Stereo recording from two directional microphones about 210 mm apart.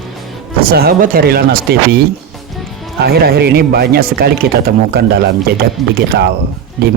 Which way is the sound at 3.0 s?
50° right (ahead or behind).